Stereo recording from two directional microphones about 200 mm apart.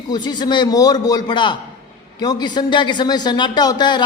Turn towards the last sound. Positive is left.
turn(degrees=20)  # may be behind; listen again after turning